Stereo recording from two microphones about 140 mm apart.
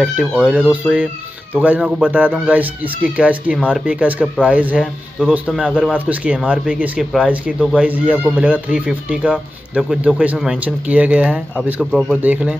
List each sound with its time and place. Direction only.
0.0 s speech: 5° right (ahead or behind)
5.7 s speech: 5° left (ahead or behind)
5.9 s speech: 10° right (ahead or behind)